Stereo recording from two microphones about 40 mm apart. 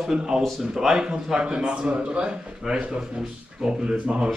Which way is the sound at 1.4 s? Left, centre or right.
Right.